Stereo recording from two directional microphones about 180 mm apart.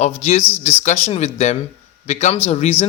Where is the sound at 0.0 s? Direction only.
35° left (ahead or behind).